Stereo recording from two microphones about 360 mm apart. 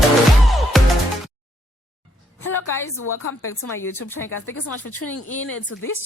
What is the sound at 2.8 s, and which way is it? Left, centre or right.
A woman's voice, left.